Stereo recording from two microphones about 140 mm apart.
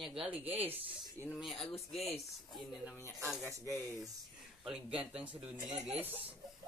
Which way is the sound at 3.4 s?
20° right (ahead or behind).